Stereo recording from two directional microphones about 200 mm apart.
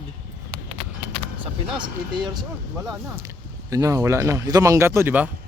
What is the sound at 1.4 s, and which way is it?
Speech, 25° right (ahead or behind).